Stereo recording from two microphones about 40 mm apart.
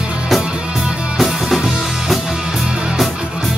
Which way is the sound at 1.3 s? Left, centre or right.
Centre.